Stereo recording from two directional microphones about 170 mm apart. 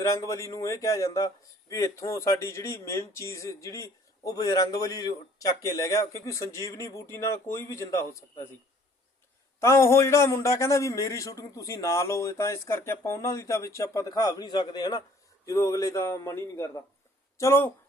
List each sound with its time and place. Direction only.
0.0 s a man's voice: 20° left (ahead or behind)
9.6 s speech: 15° left (ahead or behind)